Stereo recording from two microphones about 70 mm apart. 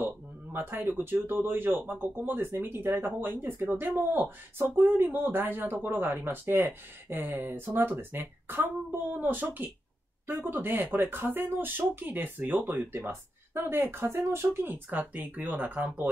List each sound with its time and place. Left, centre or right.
0.0 s speech: right